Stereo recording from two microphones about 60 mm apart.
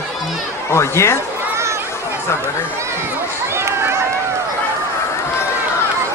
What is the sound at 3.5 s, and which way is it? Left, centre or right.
Run, right.